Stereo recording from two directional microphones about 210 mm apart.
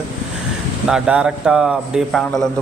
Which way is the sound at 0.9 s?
5° right (ahead or behind).